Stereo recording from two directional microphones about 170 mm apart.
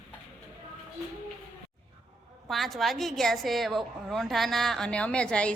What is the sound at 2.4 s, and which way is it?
A woman's voice, centre (ahead or behind).